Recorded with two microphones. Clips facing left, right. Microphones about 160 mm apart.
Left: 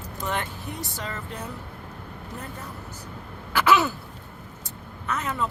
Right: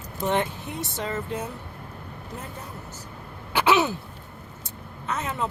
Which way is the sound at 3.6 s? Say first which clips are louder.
Even; 25° right (ahead or behind).